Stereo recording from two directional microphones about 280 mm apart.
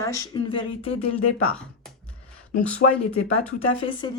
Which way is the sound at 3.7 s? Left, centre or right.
Centre.